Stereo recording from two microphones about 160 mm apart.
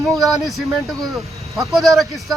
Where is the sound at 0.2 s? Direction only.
Centre (ahead or behind).